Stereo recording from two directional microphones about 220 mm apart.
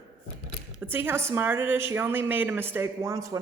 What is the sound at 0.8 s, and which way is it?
A woman's voice, 10° right (ahead or behind).